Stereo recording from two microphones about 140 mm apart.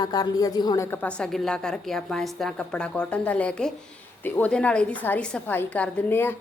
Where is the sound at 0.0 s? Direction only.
30° left (ahead or behind).